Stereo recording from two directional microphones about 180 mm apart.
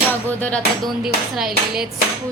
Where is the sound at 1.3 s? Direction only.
Centre (ahead or behind).